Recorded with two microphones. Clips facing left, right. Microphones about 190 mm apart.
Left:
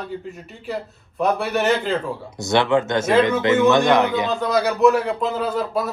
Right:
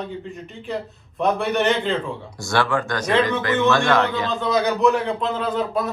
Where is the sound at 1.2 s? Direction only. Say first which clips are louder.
Even; centre (ahead or behind).